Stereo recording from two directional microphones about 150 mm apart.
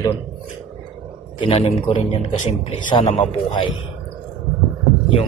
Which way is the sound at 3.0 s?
45° left (ahead or behind).